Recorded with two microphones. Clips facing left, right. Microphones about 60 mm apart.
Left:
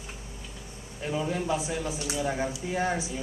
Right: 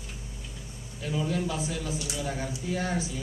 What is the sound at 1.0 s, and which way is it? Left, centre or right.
A woman's voice, left.